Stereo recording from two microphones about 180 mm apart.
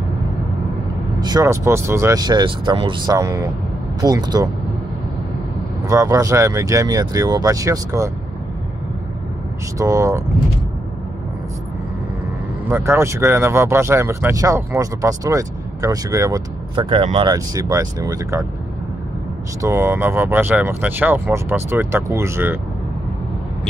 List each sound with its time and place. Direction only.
1.2 s speech: 20° right (ahead or behind)
5.9 s speech: 20° right (ahead or behind)
9.8 s speech: 15° right (ahead or behind)
12.6 s speech: 15° right (ahead or behind)
19.6 s speech: 15° right (ahead or behind)